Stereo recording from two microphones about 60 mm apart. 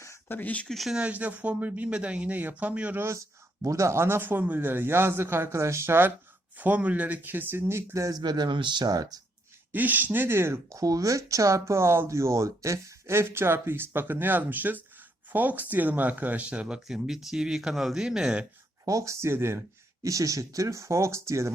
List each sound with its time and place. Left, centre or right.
0.3 s speech: left
0.7 s speech: centre
0.9 s speech: right
3.0 s speech: right
6.6 s speech: right
7.5 s speech: right
7.9 s speech: right
8.9 s speech: right
9.7 s speech: right
10.8 s speech: right; by 16.8 s centre
16.8 s speech: centre
18.9 s speech: right
20.0 s speech: right